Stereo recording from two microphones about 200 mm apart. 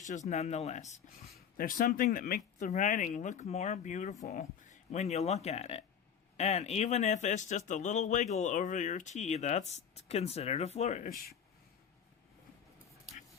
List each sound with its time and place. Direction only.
0.0 s speech: 35° left (ahead or behind)
1.2 s speech: 50° left (ahead or behind)